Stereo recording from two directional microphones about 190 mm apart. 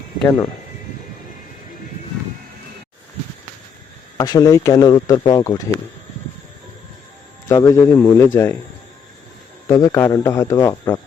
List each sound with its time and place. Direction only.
4.2 s speech: 20° left (ahead or behind)
7.4 s speech: 15° left (ahead or behind)
9.6 s speech: 20° left (ahead or behind)